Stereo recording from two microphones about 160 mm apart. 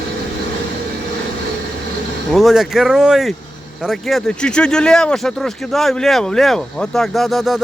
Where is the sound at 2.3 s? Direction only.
Centre (ahead or behind).